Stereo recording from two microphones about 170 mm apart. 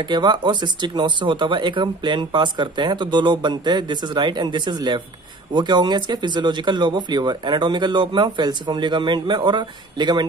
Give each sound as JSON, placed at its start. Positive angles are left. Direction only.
{"t": 0.1, "sound": "speech", "side_deg": -25}